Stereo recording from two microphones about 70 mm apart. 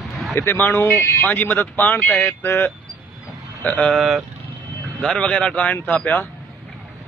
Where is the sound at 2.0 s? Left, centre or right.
Centre.